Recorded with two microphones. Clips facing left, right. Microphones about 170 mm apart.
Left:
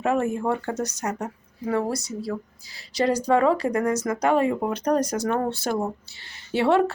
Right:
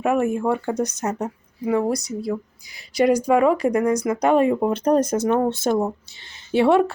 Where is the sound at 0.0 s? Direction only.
15° right (ahead or behind).